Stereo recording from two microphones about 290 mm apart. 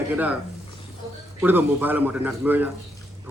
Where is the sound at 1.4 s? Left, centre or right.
Centre.